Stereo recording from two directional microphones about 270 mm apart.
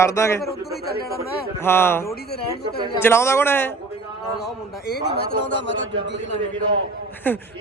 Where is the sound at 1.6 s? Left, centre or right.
Centre.